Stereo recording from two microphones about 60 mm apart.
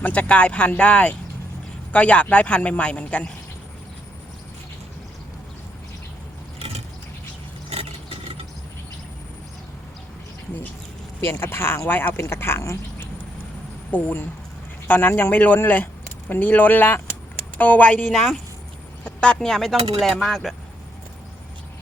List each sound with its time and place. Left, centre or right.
0.0 s a man's voice: left
11.2 s speech: left
13.9 s a man's voice: left
18.1 s speech: centre